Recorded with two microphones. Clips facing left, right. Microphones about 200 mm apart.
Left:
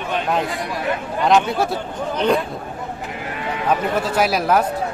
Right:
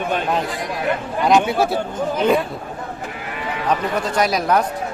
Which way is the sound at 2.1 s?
5° right (ahead or behind).